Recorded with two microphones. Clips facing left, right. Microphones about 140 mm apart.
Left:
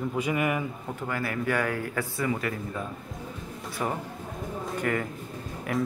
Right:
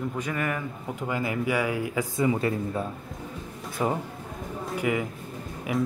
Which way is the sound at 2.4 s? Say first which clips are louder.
Right 5 dB; 25° right (ahead or behind).